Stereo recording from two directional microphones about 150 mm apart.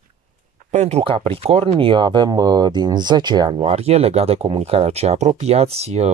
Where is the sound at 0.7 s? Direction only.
45° right (ahead or behind).